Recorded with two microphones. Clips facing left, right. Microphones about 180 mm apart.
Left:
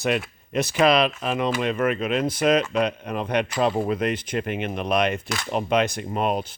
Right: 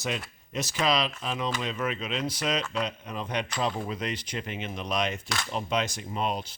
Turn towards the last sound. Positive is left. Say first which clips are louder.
# left 6 dB
turn(degrees=55)  # may be behind; listen again after turning